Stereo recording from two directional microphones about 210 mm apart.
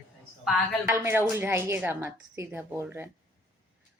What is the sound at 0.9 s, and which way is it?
A woman's voice, 15° right (ahead or behind).